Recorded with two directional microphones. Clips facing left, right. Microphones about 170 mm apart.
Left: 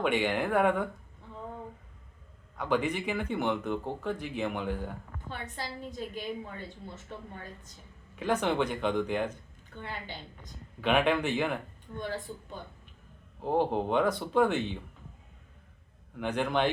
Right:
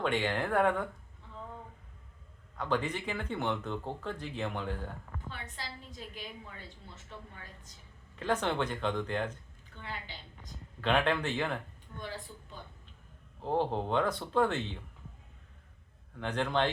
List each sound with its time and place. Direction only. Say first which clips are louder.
0.0 s speech: left 3 dB; 10° left (ahead or behind)
2.6 s speech: left 3 dB; 10° left (ahead or behind)
5.6 s speech: left 7 dB; 50° left (ahead or behind)
8.1 s speech: left 3 dB; 10° left (ahead or behind)
10.8 s speech: left 3 dB; 10° left (ahead or behind)
13.4 s speech: left 3 dB; 15° left (ahead or behind)
16.1 s speech: left 2 dB; 10° left (ahead or behind)